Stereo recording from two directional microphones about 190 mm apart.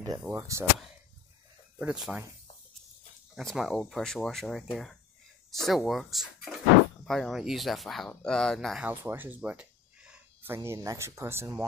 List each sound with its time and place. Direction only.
0.3 s speech: 15° right (ahead or behind)
1.8 s speech: 5° right (ahead or behind)
3.3 s speech: centre (ahead or behind)